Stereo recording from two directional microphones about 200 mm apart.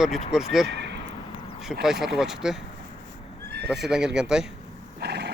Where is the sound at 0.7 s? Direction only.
60° right (ahead or behind).